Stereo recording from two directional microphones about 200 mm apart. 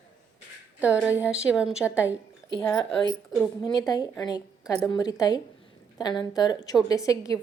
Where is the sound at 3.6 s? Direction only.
20° left (ahead or behind).